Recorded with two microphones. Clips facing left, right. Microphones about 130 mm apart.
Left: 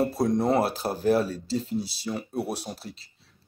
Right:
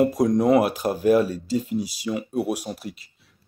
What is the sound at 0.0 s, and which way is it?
Speech, 15° right (ahead or behind).